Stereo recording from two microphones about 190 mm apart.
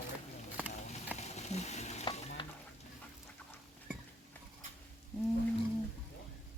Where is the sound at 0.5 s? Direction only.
10° right (ahead or behind).